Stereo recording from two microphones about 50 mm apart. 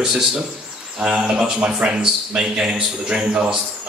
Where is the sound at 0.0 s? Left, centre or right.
Centre.